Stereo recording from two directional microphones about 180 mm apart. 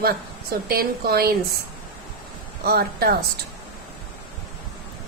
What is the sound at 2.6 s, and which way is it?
Speech, 60° right (ahead or behind).